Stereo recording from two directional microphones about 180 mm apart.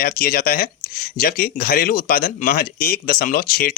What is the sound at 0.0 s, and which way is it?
Speech, 55° left (ahead or behind).